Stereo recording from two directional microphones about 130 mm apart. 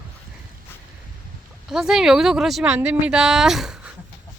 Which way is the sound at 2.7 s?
10° right (ahead or behind).